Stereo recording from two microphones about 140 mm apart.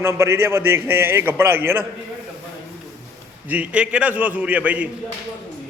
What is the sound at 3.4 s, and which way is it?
A man's voice, 10° right (ahead or behind).